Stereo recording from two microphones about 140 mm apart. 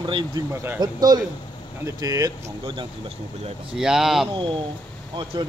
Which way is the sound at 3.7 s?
5° right (ahead or behind).